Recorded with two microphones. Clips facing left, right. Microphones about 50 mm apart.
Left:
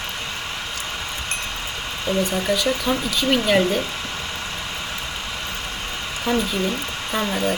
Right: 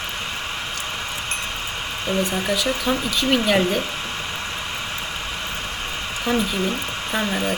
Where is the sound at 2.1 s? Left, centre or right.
Right.